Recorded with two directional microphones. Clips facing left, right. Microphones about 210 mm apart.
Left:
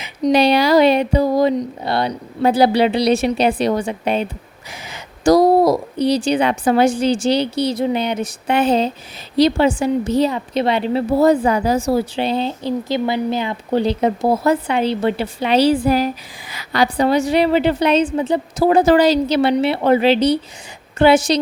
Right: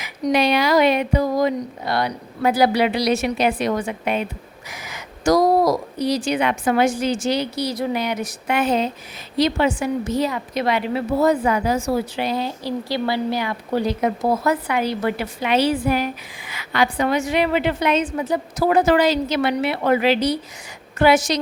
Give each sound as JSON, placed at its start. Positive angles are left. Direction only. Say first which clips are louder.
{"t": 0.0, "sound": "a woman's voice", "louder": "left 4 dB", "side_deg": 30}